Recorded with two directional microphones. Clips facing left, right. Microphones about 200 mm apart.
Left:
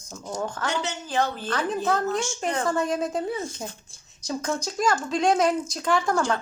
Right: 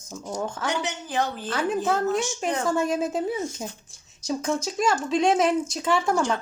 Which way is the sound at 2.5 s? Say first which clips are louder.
Right 1 dB; 10° right (ahead or behind).